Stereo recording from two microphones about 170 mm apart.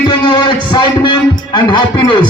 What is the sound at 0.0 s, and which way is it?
Music, 25° left (ahead or behind).